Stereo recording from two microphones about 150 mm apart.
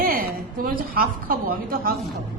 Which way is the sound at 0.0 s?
85° right.